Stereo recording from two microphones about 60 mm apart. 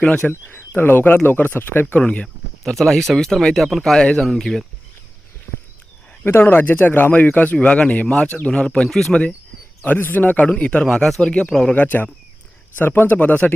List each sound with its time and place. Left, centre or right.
0.5 s speech: left
2.0 s speech: centre
6.4 s speech: left
8.9 s speech: centre
9.8 s speech: left
10.8 s speech: centre
11.7 s speech: left